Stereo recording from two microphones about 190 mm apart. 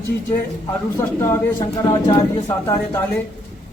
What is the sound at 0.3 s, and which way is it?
Speech, 15° left (ahead or behind).